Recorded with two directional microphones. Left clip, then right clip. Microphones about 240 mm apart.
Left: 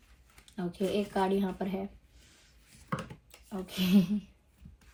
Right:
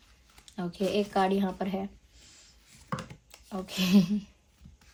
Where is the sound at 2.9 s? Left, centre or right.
Centre.